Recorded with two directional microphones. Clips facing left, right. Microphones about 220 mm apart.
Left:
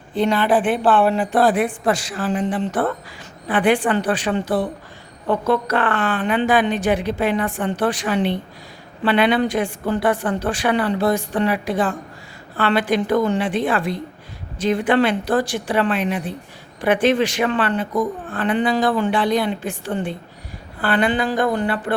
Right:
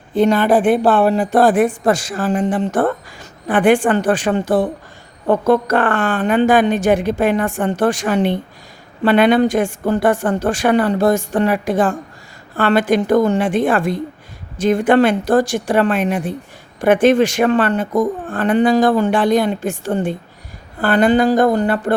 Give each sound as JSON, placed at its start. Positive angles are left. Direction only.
{"t": 0.1, "sound": "a woman's voice", "side_deg": -45}